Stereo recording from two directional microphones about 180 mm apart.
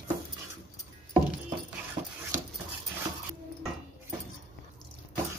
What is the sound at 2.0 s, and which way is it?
Dog, 40° right (ahead or behind).